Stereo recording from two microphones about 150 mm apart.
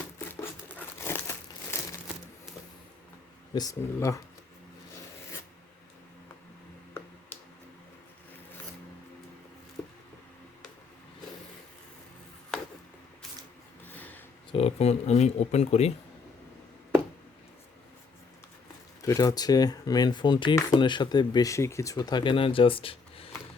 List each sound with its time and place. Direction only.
0.9 s crumpling: 15° left (ahead or behind)
3.5 s speech: 25° left (ahead or behind)
13.8 s a sound: 10° left (ahead or behind)
14.5 s speech: 45° left (ahead or behind)
19.0 s speech: 20° left (ahead or behind); by 23.3 s 40° left (ahead or behind)